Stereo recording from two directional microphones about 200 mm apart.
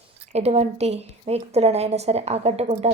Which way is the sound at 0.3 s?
30° right (ahead or behind).